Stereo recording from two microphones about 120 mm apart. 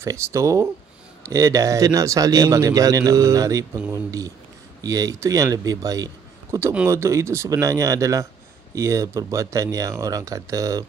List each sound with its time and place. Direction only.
0.0 s speech: 25° right (ahead or behind)